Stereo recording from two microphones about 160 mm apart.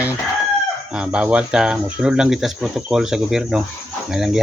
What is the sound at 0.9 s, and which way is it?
Speech, 5° right (ahead or behind).